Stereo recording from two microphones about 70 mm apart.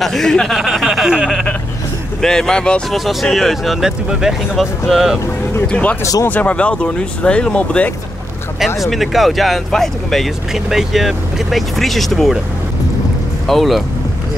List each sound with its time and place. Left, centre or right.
0.0 s speech: centre
0.6 s speech: centre
2.2 s speech: centre
2.9 s speech: centre
5.7 s speech: centre
8.5 s speech: centre
13.5 s speech: centre